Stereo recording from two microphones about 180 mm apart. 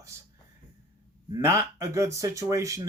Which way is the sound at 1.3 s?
20° right (ahead or behind).